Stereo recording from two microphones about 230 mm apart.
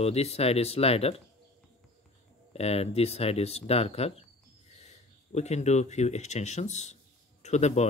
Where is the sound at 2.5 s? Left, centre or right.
Left.